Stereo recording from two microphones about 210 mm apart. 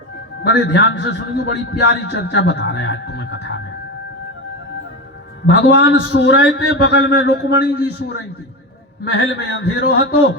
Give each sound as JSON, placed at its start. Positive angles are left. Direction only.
{"t": 0.4, "sound": "a man's voice", "side_deg": 55}
{"t": 5.5, "sound": "a man's voice", "side_deg": 55}
{"t": 9.1, "sound": "a man's voice", "side_deg": 50}